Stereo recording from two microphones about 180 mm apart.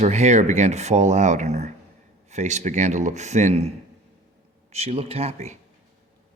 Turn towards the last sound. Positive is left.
turn(degrees=-40)  # may be behind; listen again after turning